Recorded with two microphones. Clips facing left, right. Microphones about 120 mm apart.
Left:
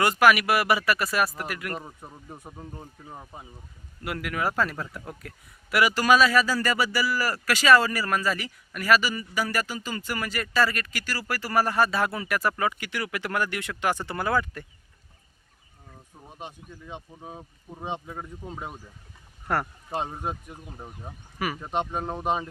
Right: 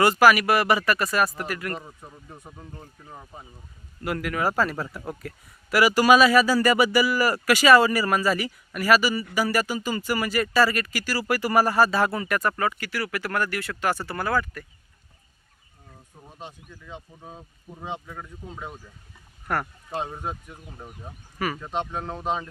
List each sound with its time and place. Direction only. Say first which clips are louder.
0.0 s speech: right 3 dB; centre (ahead or behind)
2.3 s a man's voice: left 3 dB; 15° left (ahead or behind)
16.2 s speech: left 1 dB; 15° left (ahead or behind)
19.9 s speech: even; 10° left (ahead or behind)